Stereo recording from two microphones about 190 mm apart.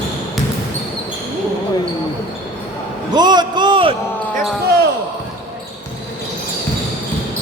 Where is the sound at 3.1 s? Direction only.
20° right (ahead or behind).